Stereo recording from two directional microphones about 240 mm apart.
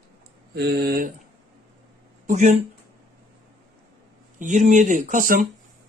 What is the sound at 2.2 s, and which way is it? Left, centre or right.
Speech, right.